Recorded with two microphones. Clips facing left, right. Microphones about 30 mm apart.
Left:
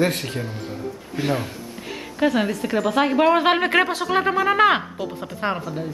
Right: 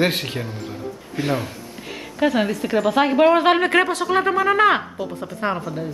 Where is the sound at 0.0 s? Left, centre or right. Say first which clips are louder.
Right 1 dB; right.